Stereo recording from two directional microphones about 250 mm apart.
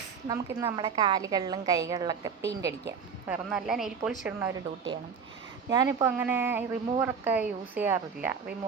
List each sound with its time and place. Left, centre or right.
0.3 s a woman's voice: centre
3.2 s a woman's voice: centre